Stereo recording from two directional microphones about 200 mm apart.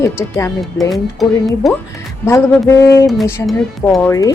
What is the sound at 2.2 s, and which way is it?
Speech, 10° left (ahead or behind).